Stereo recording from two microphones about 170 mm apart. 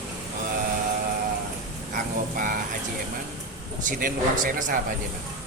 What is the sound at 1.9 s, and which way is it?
Speech, 50° right (ahead or behind).